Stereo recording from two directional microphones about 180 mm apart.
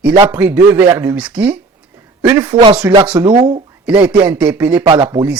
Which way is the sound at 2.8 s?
15° right (ahead or behind).